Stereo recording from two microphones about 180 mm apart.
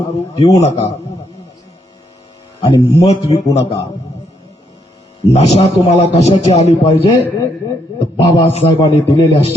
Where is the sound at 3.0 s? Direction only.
35° left (ahead or behind).